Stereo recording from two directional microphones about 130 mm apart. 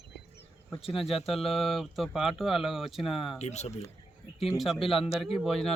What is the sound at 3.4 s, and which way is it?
Speech, 60° left (ahead or behind).